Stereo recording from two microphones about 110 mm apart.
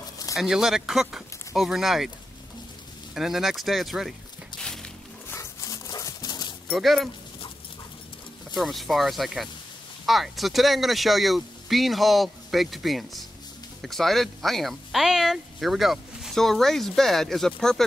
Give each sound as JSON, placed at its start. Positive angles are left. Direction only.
{"t": 0.4, "sound": "speech", "side_deg": -5}
{"t": 3.2, "sound": "speech", "side_deg": -5}
{"t": 5.3, "sound": "a sound", "side_deg": 25}
{"t": 6.7, "sound": "speech", "side_deg": 0}
{"t": 8.5, "sound": "speech", "side_deg": 0}